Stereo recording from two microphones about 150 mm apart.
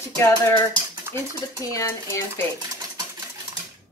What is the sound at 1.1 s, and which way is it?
Speech, 20° right (ahead or behind).